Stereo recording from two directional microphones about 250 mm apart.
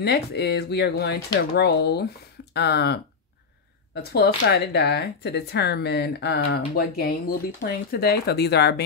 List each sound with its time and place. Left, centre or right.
0.0 s speech: left